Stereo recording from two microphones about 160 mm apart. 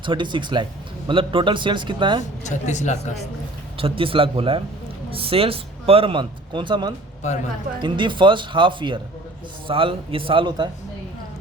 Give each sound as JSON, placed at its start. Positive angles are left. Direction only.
{"t": 0.0, "sound": "a man's voice", "side_deg": -30}
{"t": 2.4, "sound": "speech", "side_deg": 50}
{"t": 3.8, "sound": "a man's voice", "side_deg": -35}
{"t": 7.2, "sound": "speech", "side_deg": 50}
{"t": 7.8, "sound": "a man's voice", "side_deg": -30}